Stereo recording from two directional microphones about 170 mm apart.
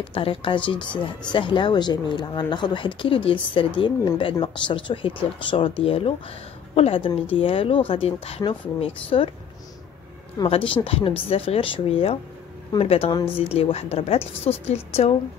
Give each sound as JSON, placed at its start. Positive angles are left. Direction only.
{"t": 0.0, "sound": "speech", "side_deg": 30}
{"t": 10.4, "sound": "speech", "side_deg": 30}